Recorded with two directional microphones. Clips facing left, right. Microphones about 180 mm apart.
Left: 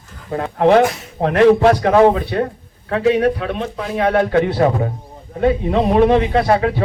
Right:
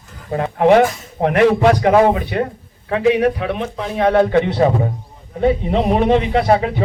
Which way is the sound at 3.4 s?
15° right (ahead or behind).